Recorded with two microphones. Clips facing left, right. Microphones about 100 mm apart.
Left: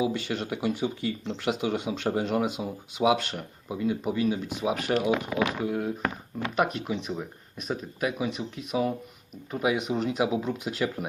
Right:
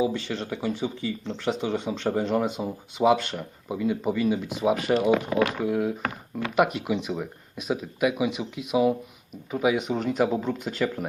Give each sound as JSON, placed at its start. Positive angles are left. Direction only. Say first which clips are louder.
{"t": 0.0, "sound": "speech", "louder": "right 2 dB", "side_deg": 10}